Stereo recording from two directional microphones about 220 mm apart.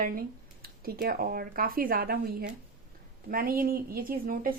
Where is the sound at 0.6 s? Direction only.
40° right (ahead or behind).